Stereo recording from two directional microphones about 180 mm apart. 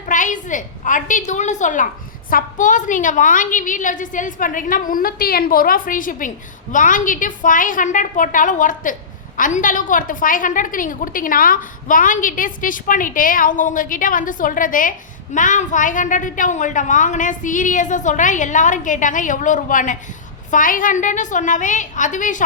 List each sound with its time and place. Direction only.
0.1 s a woman's voice: 45° left (ahead or behind)